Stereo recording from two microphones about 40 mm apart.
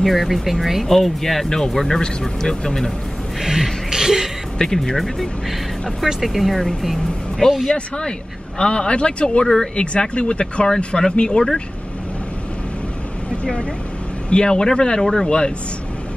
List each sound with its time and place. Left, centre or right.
0.0 s speech: centre
0.8 s speech: centre
3.3 s music: centre
4.6 s speech: centre
6.0 s speech: centre
7.4 s speech: centre
13.4 s speech: left